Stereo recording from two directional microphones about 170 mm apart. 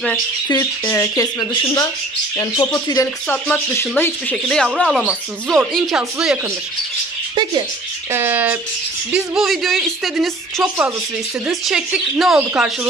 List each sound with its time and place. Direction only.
0.5 s speech: 20° left (ahead or behind); by 6.4 s 5° right (ahead or behind)
8.1 s speech: 15° right (ahead or behind)